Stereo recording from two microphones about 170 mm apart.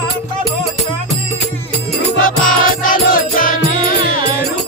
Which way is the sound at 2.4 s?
55° left (ahead or behind).